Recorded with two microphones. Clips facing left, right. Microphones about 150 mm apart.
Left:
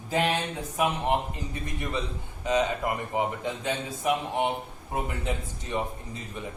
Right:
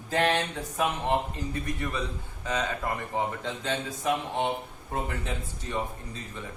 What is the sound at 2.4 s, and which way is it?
Speech, 15° left (ahead or behind).